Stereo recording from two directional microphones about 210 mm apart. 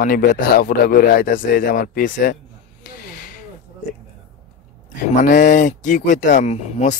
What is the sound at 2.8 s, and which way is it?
Snake, 45° left (ahead or behind).